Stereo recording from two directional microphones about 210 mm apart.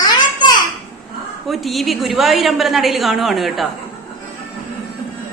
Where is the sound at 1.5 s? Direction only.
Centre (ahead or behind).